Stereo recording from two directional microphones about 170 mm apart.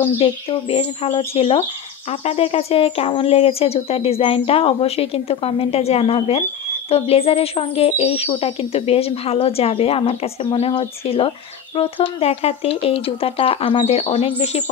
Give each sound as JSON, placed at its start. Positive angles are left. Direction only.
{"t": 0.2, "sound": "speech", "side_deg": 35}